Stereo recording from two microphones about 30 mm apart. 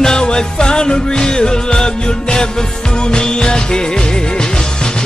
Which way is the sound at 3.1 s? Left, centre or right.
Left.